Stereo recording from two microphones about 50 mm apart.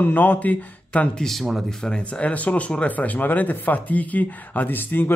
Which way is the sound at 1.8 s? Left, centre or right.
Centre.